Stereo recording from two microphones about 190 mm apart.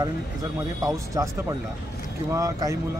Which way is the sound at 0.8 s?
15° right (ahead or behind).